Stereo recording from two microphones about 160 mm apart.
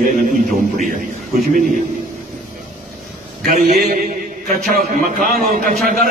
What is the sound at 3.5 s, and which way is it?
A man's voice, 55° right (ahead or behind).